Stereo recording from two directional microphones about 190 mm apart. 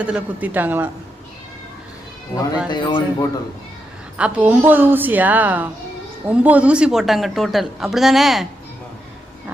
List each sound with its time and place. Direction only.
0.0 s a woman's voice: 5° right (ahead or behind)
2.6 s a man's voice: 25° left (ahead or behind)
4.2 s a woman's voice: 10° right (ahead or behind)